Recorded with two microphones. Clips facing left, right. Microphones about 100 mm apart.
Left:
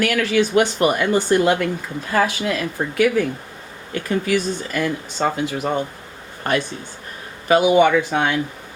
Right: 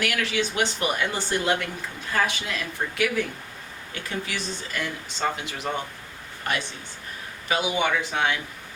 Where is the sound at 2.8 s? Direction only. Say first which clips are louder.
Left 5 dB; 45° left (ahead or behind).